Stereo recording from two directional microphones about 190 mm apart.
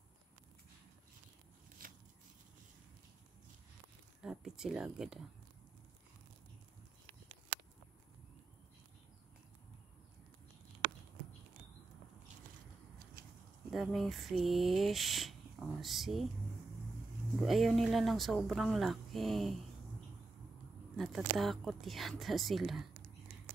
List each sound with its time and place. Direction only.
4.2 s speech: 5° right (ahead or behind)
13.7 s speech: centre (ahead or behind)
17.5 s speech: centre (ahead or behind)
20.9 s speech: centre (ahead or behind)